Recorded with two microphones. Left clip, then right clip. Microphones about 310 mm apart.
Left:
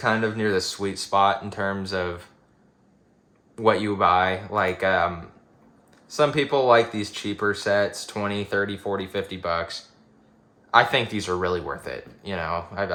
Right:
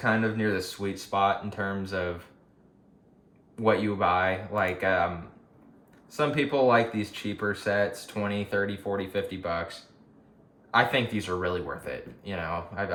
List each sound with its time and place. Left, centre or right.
0.0 s speech: left
3.5 s speech: left
6.1 s speech: left